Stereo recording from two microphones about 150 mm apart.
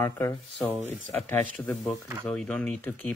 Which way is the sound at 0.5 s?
5° left (ahead or behind).